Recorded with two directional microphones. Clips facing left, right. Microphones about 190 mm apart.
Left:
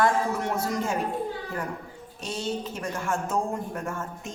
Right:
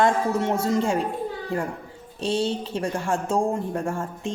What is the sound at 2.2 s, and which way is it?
A woman's voice, 30° right (ahead or behind).